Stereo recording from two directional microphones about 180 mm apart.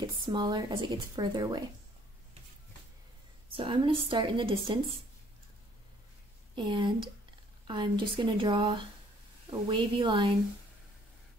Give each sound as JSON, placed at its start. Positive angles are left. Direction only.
{"t": 0.0, "sound": "speech", "side_deg": -25}
{"t": 3.5, "sound": "speech", "side_deg": -30}
{"t": 6.5, "sound": "speech", "side_deg": -25}